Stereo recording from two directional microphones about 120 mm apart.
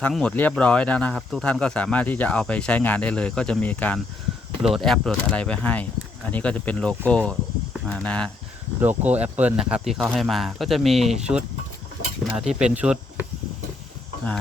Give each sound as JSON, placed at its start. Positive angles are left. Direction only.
{"t": 0.0, "sound": "speech", "side_deg": 5}
{"t": 8.8, "sound": "speech", "side_deg": -15}